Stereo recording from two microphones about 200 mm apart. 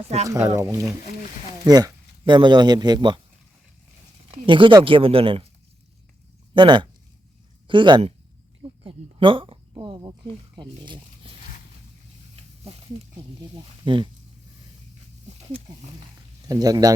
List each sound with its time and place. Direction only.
0.4 s speech: 15° right (ahead or behind)
4.3 s speech: 25° right (ahead or behind)
6.5 s speech: 25° right (ahead or behind)
13.8 s speech: 25° right (ahead or behind)
16.5 s speech: 20° right (ahead or behind)